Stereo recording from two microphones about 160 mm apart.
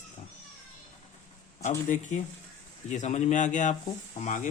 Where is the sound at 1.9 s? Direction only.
50° left (ahead or behind).